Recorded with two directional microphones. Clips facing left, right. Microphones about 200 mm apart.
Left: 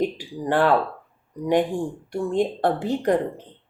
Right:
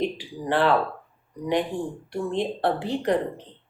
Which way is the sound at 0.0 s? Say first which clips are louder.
Left 3 dB; 45° left (ahead or behind).